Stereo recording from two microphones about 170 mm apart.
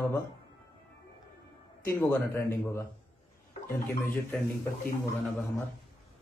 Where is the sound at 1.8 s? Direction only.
15° left (ahead or behind).